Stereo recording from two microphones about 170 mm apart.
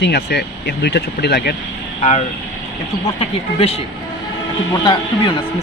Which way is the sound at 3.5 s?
35° left (ahead or behind).